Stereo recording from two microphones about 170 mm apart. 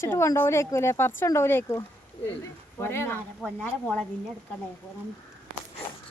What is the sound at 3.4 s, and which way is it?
Speech, 5° left (ahead or behind).